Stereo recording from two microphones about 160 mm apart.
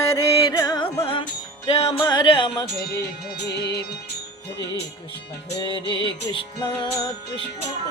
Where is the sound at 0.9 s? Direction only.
35° left (ahead or behind).